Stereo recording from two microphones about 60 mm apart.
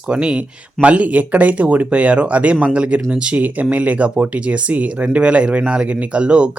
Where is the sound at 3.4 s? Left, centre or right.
Right.